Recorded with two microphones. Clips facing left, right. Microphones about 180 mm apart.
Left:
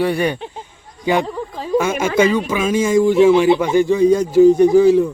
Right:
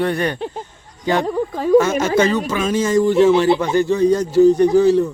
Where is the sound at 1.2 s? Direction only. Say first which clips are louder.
Right 5 dB; 45° right (ahead or behind).